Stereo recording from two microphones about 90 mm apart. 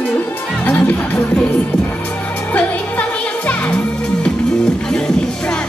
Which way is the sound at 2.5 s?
15° left (ahead or behind).